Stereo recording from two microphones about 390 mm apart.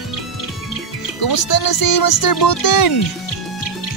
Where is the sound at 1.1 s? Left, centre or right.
Left.